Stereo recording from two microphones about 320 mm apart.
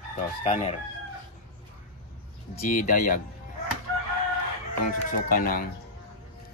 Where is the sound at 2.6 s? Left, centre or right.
Left.